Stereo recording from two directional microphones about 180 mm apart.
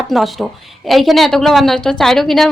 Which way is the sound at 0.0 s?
Centre (ahead or behind).